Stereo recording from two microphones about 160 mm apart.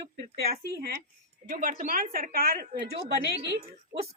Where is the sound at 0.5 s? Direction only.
70° right (ahead or behind).